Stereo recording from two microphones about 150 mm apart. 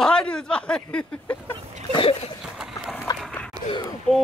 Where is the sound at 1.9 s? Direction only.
35° left (ahead or behind).